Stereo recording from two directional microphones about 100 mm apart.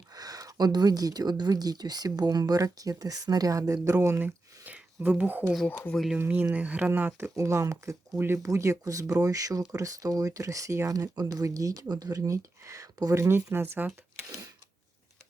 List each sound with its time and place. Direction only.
0.1 s speech: 40° right (ahead or behind)
4.6 s speech: 15° right (ahead or behind)
5.6 s speech: 15° left (ahead or behind)
6.1 s speech: 15° right (ahead or behind)
7.3 s speech: 30° right (ahead or behind)
14.3 s speech: 35° right (ahead or behind)